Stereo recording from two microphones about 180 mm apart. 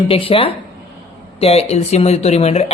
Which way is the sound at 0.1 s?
30° left (ahead or behind).